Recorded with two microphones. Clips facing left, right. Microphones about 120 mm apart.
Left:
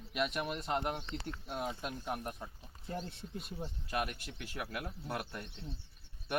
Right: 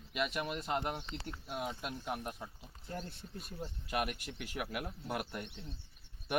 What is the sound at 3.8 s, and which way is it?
Speech, 10° right (ahead or behind).